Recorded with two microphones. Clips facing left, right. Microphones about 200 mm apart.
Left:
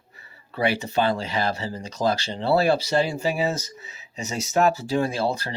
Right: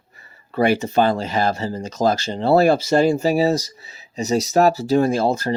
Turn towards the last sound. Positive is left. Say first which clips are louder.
# right 7 dB
turn(degrees=-45)  # may be behind; listen again after turning